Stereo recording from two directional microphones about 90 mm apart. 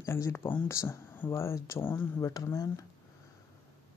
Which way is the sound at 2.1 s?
35° left (ahead or behind).